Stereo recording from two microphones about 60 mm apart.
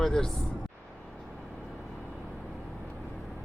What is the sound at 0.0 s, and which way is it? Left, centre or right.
Speech, centre.